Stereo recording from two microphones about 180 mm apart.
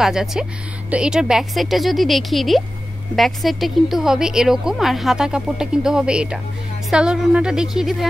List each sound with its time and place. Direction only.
0.0 s a woman's voice: 5° right (ahead or behind)